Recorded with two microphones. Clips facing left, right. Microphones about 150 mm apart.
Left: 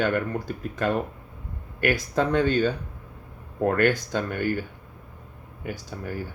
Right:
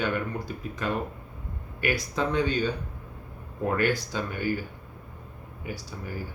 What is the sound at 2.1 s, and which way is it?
Speech, 55° left (ahead or behind).